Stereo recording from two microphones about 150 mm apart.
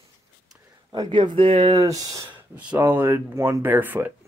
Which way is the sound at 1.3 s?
35° right (ahead or behind).